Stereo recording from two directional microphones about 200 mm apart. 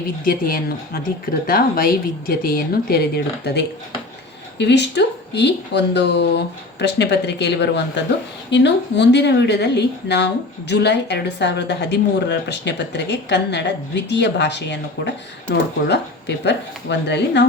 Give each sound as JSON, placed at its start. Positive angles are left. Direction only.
{"t": 0.3, "sound": "speech", "side_deg": 45}